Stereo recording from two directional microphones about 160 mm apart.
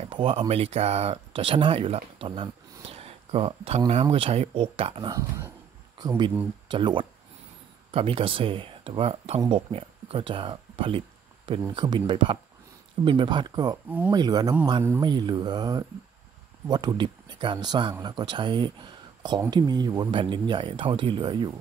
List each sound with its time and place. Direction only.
0.0 s speech: 35° right (ahead or behind)
13.8 s speech: 10° right (ahead or behind)
14.1 s speech: 25° right (ahead or behind)